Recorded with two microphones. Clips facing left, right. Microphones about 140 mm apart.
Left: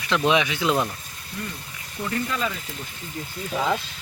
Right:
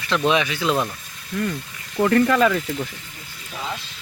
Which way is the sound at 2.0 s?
70° right (ahead or behind).